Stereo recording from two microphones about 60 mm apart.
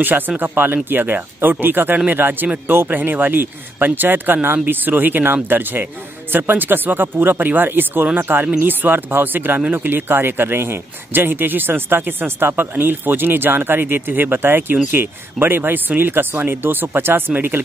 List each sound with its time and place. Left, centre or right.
0.4 s a man's voice: right